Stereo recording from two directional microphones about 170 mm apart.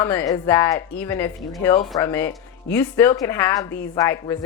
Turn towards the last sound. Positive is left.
turn(degrees=15)  # may be behind; listen again after turning